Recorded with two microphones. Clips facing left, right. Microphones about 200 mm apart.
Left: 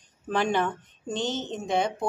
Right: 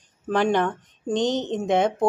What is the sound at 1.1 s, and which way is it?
Speech, 15° right (ahead or behind).